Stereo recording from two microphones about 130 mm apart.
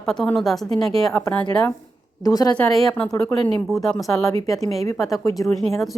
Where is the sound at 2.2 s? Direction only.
30° left (ahead or behind).